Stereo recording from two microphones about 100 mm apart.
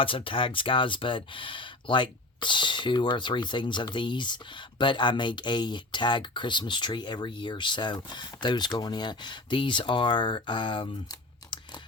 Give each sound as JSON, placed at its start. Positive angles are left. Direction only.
{"t": 0.0, "sound": "speech", "side_deg": 60}